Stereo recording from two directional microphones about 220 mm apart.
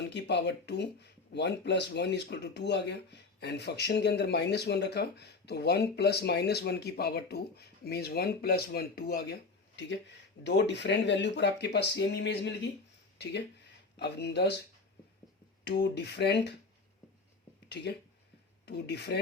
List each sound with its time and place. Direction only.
0.1 s speech: 50° left (ahead or behind)
13.9 s speech: 50° left (ahead or behind)
15.6 s speech: 50° left (ahead or behind)
18.6 s speech: 50° left (ahead or behind)